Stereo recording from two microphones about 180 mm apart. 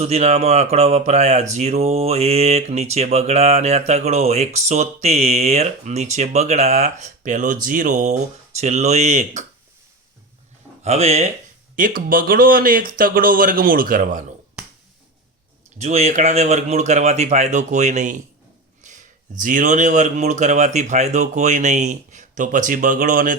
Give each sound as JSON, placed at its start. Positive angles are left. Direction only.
{"t": 0.0, "sound": "speech", "side_deg": -35}
{"t": 10.8, "sound": "speech", "side_deg": -35}
{"t": 11.8, "sound": "speech", "side_deg": -50}
{"t": 15.8, "sound": "speech", "side_deg": -35}